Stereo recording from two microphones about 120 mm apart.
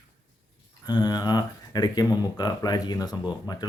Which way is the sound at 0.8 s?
35° left (ahead or behind).